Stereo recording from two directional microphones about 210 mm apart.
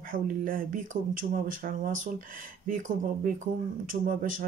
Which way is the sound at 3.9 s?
40° right (ahead or behind).